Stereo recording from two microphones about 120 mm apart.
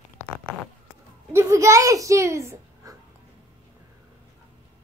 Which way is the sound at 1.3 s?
25° right (ahead or behind).